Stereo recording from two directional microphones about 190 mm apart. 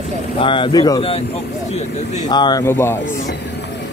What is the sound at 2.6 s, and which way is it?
Speech, 10° left (ahead or behind).